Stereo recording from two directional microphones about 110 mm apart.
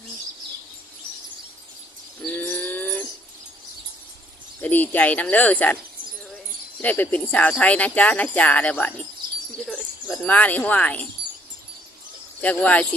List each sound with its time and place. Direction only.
2.3 s bird: 15° left (ahead or behind)
4.6 s speech: 15° left (ahead or behind)
6.8 s speech: 15° left (ahead or behind)
9.2 s a sound: 40° right (ahead or behind)
10.2 s speech: 15° left (ahead or behind)
12.4 s speech: 15° left (ahead or behind)